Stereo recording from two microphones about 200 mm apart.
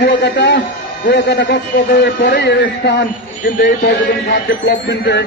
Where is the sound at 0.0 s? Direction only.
55° left (ahead or behind).